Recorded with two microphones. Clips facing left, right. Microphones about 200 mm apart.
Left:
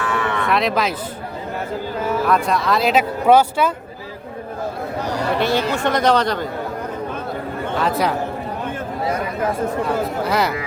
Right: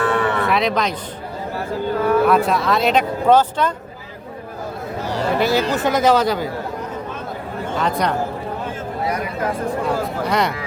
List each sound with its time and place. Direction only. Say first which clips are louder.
0.0 s cattle: right 3 dB; 35° right (ahead or behind)
0.4 s speech: even; centre (ahead or behind)
2.2 s speech: right 2 dB; centre (ahead or behind)
5.4 s speech: right 2 dB; centre (ahead or behind)
7.8 s speech: left 1 dB; 5° left (ahead or behind)
10.2 s speech: right 1 dB; 5° left (ahead or behind)